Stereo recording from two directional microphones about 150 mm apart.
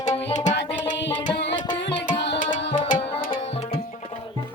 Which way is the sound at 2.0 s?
60° left (ahead or behind).